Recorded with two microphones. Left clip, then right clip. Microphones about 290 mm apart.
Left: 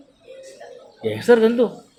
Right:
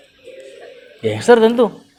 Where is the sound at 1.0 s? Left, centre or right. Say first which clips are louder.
Right 4 dB; right.